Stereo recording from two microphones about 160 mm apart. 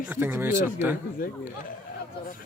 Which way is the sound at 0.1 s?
15° right (ahead or behind).